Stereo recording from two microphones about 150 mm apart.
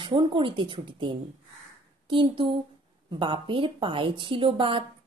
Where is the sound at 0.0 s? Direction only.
35° right (ahead or behind).